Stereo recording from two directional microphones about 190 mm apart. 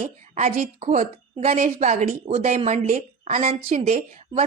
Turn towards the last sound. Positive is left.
turn(degrees=-35)  # may be behind; listen again after turning